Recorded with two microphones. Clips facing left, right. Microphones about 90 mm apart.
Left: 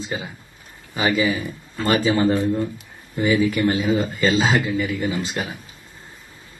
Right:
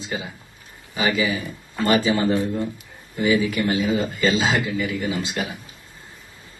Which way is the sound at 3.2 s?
40° left (ahead or behind).